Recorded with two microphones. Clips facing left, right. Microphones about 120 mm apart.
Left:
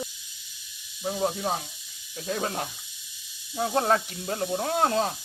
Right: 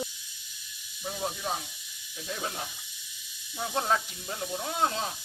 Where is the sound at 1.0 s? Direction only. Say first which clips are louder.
Left 6 dB; 40° left (ahead or behind).